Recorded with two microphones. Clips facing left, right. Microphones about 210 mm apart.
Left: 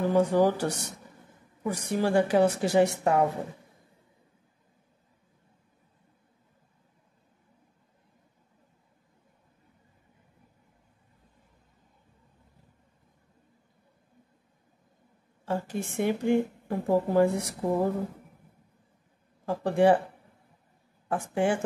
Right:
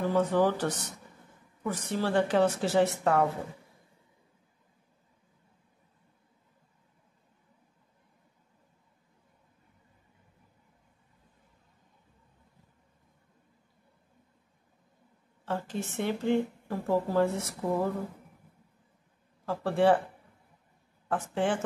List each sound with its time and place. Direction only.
0.1 s a woman's voice: 10° left (ahead or behind)
15.4 s a woman's voice: 10° left (ahead or behind)
19.4 s a woman's voice: 15° left (ahead or behind)
21.1 s a woman's voice: 10° left (ahead or behind)